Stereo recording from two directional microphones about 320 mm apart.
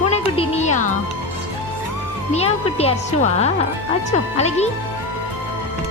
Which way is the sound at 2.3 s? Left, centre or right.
Centre.